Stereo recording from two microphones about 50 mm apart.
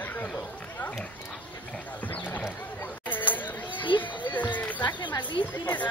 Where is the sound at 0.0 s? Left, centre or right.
Left.